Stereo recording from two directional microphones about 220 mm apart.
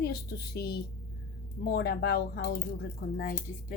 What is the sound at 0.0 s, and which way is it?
A woman's voice, 45° left (ahead or behind).